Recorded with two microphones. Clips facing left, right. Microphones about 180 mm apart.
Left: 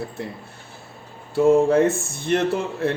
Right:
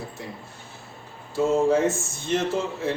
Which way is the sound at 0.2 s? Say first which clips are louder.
Left 6 dB; 65° left (ahead or behind).